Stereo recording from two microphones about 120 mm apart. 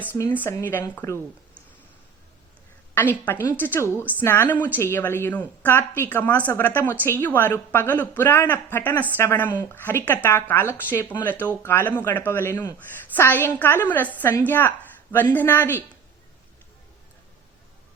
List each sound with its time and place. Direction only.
0.2 s speech: 15° left (ahead or behind)
2.9 s a woman's voice: 15° left (ahead or behind)